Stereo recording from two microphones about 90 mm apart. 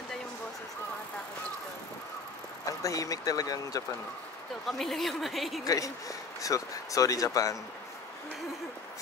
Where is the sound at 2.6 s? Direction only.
40° left (ahead or behind).